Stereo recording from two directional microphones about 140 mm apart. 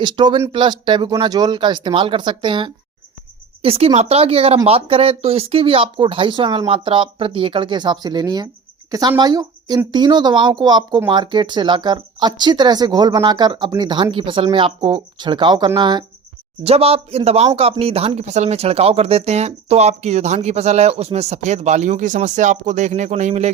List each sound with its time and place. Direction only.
0.0 s speech: 35° right (ahead or behind)
3.6 s speech: 45° right (ahead or behind)
16.6 s speech: 45° right (ahead or behind)